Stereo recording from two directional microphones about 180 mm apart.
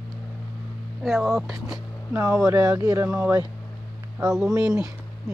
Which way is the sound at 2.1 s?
15° right (ahead or behind).